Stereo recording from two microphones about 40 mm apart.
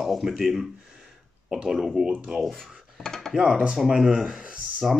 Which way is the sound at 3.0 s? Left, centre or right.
Centre.